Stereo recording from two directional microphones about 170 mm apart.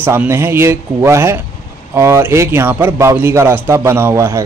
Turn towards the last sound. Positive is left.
turn(degrees=-15)  # may be behind; listen again after turning